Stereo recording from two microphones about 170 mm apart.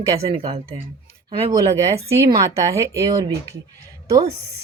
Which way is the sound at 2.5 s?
20° right (ahead or behind).